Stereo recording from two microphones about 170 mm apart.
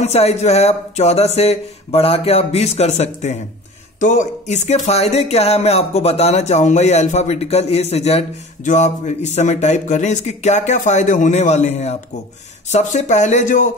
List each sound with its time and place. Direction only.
0.0 s speech: 40° left (ahead or behind)